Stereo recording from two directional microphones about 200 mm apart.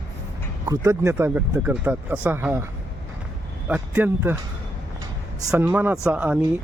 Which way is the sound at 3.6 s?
5° right (ahead or behind).